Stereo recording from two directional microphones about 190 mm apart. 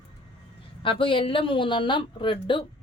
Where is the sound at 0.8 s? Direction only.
25° left (ahead or behind).